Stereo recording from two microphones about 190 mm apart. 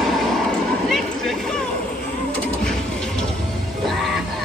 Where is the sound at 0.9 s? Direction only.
Centre (ahead or behind).